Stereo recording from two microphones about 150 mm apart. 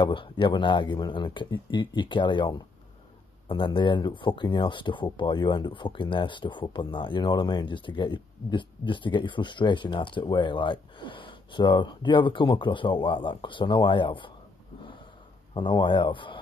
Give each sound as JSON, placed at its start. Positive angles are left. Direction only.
{"t": 0.0, "sound": "speech", "side_deg": 35}
{"t": 15.5, "sound": "speech", "side_deg": 30}